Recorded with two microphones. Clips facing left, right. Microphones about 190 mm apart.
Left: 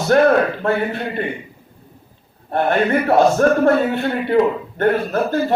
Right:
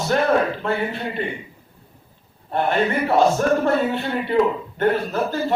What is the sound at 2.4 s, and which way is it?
A man's voice, 50° left (ahead or behind).